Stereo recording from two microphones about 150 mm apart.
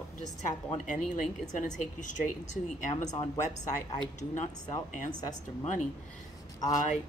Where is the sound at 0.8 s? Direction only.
60° left (ahead or behind).